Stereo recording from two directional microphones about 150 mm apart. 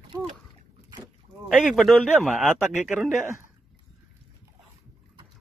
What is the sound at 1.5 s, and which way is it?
A man's voice, 5° right (ahead or behind).